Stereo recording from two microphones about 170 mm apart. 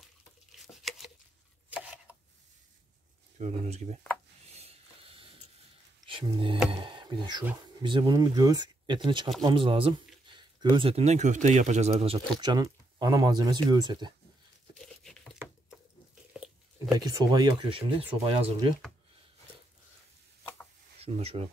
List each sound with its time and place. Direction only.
0.5 s a sound: centre (ahead or behind)
1.7 s chopping: 10° right (ahead or behind)
3.3 s speech: 40° right (ahead or behind)
4.5 s mechanisms: 35° right (ahead or behind)
6.0 s speech: 30° right (ahead or behind)
6.8 s a sound: 30° right (ahead or behind)
7.8 s speech: 25° right (ahead or behind)
12.4 s speech: 25° right (ahead or behind)
14.7 s tearing: centre (ahead or behind)
16.9 s speech: 20° right (ahead or behind)
21.0 s speech: 35° right (ahead or behind)